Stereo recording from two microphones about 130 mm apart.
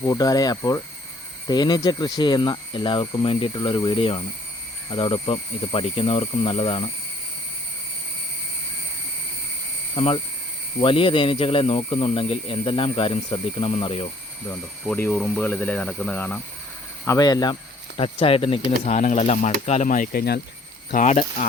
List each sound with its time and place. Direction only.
0.0 s speech: 30° left (ahead or behind); by 6.9 s 45° left (ahead or behind)
9.9 s speech: 50° left (ahead or behind)
14.8 s speech: 15° left (ahead or behind)
17.1 s speech: 30° left (ahead or behind)
18.9 s speech: 60° left (ahead or behind)
20.9 s speech: 65° left (ahead or behind)